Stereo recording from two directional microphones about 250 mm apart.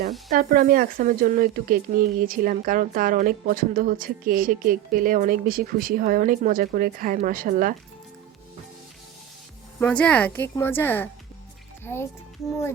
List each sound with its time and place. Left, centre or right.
0.3 s speech: right
9.8 s a woman's voice: centre